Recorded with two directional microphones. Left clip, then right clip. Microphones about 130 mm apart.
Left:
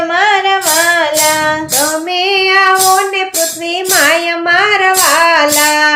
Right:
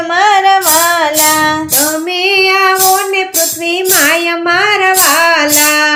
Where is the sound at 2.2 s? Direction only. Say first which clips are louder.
Right 1 dB; 15° right (ahead or behind).